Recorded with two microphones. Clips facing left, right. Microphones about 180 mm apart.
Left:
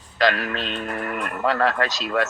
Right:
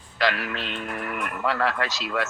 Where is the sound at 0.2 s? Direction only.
50° left (ahead or behind).